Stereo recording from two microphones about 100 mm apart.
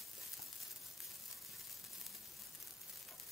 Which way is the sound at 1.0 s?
Centre (ahead or behind).